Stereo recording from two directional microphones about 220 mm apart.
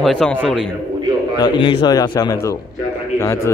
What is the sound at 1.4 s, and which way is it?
A man's voice, 20° left (ahead or behind).